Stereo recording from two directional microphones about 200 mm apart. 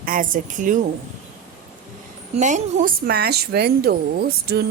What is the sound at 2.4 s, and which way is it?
A woman's voice, 40° right (ahead or behind).